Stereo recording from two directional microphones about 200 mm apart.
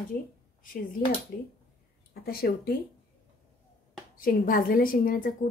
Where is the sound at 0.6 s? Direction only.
45° left (ahead or behind).